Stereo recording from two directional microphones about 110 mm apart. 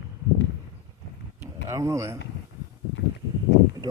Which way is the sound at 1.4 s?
25° right (ahead or behind).